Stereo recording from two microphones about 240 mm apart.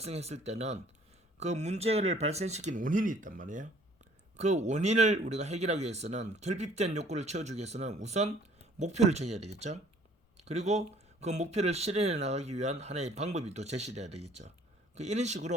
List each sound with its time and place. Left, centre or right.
0.0 s speech: right